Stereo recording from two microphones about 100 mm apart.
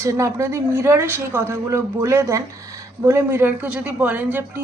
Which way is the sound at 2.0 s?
30° right (ahead or behind).